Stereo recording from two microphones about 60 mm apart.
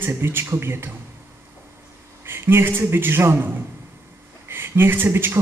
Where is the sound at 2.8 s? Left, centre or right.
Right.